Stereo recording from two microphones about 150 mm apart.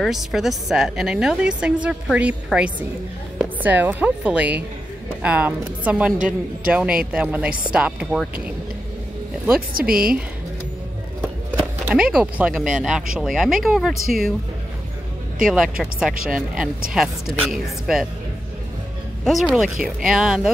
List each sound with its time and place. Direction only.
0.0 s a woman's voice: centre (ahead or behind)
9.8 s speech: 80° right
11.8 s a woman's voice: 5° right (ahead or behind)
15.4 s a woman's voice: 5° right (ahead or behind)
19.2 s a woman's voice: centre (ahead or behind)